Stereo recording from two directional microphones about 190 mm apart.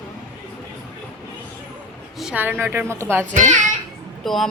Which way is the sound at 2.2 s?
5° right (ahead or behind).